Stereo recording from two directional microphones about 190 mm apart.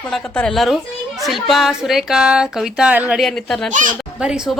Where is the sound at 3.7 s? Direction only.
40° right (ahead or behind).